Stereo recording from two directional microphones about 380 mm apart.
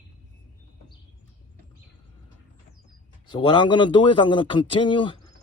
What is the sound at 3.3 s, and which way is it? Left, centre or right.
A man's voice, centre.